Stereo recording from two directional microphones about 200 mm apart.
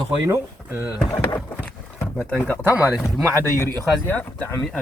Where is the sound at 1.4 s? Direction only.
Centre (ahead or behind).